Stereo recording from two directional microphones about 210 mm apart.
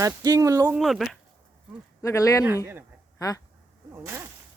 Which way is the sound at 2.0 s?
15° left (ahead or behind).